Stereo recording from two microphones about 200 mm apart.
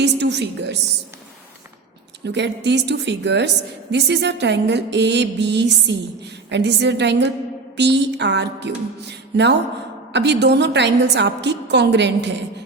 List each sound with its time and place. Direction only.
0.0 s a woman's voice: 60° right (ahead or behind)
2.2 s a woman's voice: 60° right (ahead or behind)